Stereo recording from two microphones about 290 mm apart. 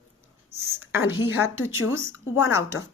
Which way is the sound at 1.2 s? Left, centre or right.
Centre.